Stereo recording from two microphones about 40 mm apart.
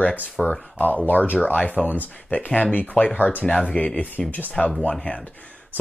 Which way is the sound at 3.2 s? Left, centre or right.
Left.